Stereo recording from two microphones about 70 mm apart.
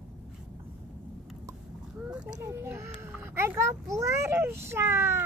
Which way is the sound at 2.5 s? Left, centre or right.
Right.